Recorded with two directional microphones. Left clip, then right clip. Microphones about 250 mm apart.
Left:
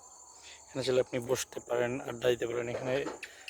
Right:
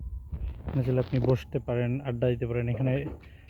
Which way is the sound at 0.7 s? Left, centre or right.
Centre.